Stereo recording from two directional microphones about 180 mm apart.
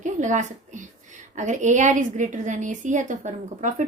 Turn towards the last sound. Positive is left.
turn(degrees=-45)  # may be behind; listen again after turning